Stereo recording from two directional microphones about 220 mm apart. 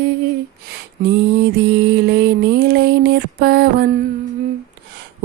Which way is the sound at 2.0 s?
45° right (ahead or behind).